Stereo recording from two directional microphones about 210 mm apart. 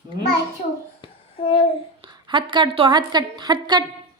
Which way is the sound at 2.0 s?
20° right (ahead or behind).